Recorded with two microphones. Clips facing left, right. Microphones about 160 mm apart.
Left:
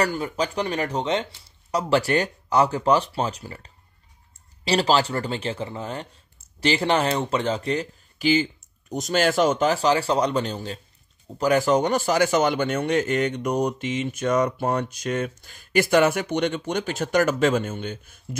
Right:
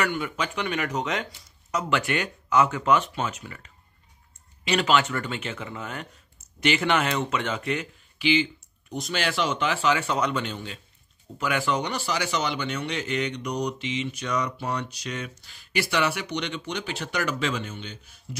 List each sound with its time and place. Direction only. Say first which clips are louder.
0.0 s speech: left 4 dB; 35° left (ahead or behind)